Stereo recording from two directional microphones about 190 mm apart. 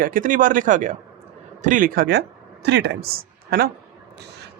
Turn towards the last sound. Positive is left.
turn(degrees=-55)  # may be behind; listen again after turning